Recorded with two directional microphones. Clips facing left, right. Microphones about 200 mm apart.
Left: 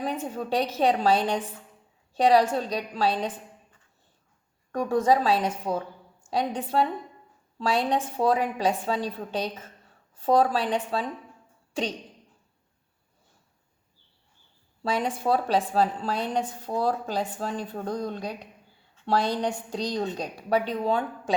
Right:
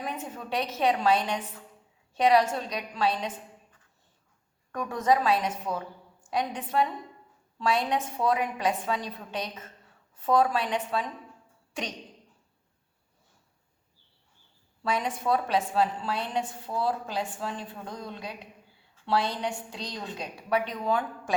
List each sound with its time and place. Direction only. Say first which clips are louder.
0.3 s a woman's voice: left 5 dB; 35° left (ahead or behind)
4.7 s a woman's voice: left 3 dB; 30° left (ahead or behind)
14.8 s a woman's voice: left 2 dB; 30° left (ahead or behind)